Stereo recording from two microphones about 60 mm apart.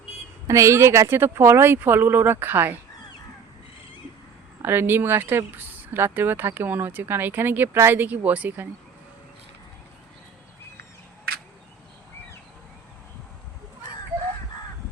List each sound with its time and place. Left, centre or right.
0.4 s a woman's voice: right
4.6 s a woman's voice: right